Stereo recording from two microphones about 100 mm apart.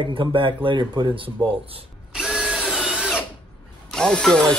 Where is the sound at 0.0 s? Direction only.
60° right (ahead or behind).